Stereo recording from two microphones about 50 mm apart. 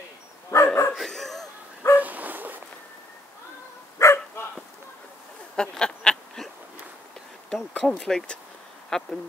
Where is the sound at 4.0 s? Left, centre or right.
Left.